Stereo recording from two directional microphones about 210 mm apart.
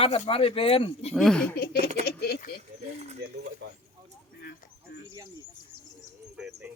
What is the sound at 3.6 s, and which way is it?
Speech, 50° right (ahead or behind).